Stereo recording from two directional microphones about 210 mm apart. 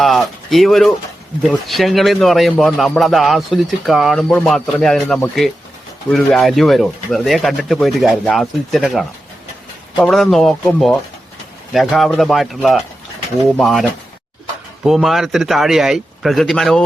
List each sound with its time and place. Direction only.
0.0 s a man's voice: centre (ahead or behind)
14.8 s a man's voice: centre (ahead or behind)